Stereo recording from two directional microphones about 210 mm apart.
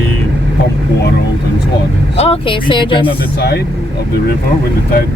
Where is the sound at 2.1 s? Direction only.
30° left (ahead or behind).